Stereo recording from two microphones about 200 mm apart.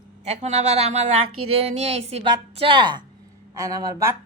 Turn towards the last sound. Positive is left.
turn(degrees=-15)  # may be behind; listen again after turning